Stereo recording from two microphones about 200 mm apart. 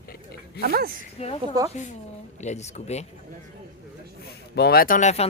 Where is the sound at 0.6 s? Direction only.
50° right (ahead or behind).